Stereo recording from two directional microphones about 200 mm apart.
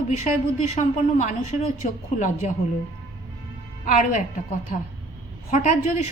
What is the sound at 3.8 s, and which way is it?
Speech, 40° left (ahead or behind).